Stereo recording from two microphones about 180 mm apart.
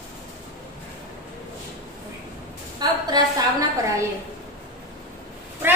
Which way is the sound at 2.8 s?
20° right (ahead or behind).